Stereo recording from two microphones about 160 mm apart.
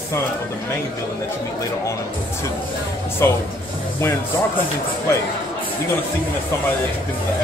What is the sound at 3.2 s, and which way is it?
Speech, 20° left (ahead or behind).